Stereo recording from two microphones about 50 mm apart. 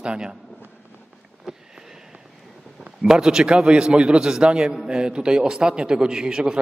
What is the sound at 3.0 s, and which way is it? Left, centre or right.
A man's voice, centre.